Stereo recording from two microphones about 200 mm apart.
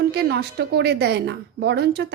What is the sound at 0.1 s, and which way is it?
A woman's voice, 55° right (ahead or behind).